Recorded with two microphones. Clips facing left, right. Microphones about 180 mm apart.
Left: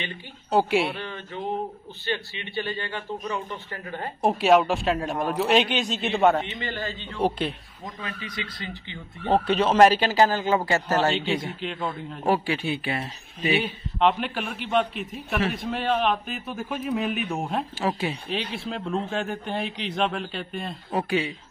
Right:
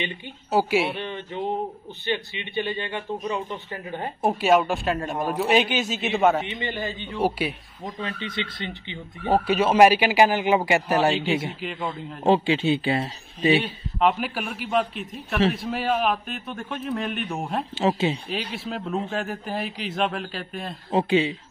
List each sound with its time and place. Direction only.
0.5 s a man's voice: 5° right (ahead or behind)
1.0 s a man's voice: 20° right (ahead or behind)
4.2 s a man's voice: centre (ahead or behind)
6.5 s a man's voice: 20° right (ahead or behind)
7.8 s a man's voice: 25° right (ahead or behind)
9.3 s a man's voice: 10° right (ahead or behind)
11.6 s a man's voice: centre (ahead or behind)
12.3 s a man's voice: 25° right (ahead or behind)
13.6 s a man's voice: 5° right (ahead or behind)
17.7 s a man's voice: 25° right (ahead or behind)
18.3 s a man's voice: centre (ahead or behind)
20.9 s a man's voice: 25° right (ahead or behind)